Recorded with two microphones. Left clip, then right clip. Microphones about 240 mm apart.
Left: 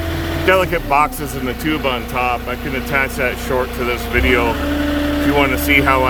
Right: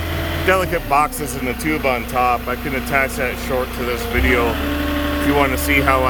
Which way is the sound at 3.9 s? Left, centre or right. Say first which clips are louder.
Left 2 dB; centre.